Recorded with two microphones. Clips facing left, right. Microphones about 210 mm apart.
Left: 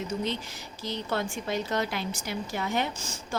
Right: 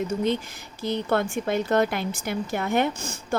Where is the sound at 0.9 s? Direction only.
55° right (ahead or behind).